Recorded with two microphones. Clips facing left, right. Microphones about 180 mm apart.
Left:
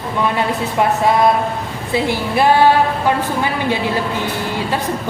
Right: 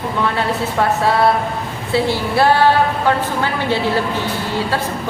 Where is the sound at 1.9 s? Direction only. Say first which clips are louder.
Right 1 dB; 15° left (ahead or behind).